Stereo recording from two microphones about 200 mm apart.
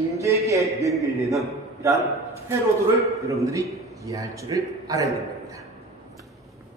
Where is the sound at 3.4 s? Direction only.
15° right (ahead or behind).